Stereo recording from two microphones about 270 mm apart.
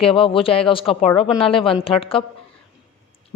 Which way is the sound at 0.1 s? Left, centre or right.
Centre.